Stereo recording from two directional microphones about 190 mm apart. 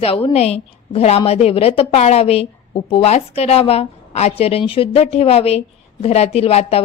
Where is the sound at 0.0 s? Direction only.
30° left (ahead or behind).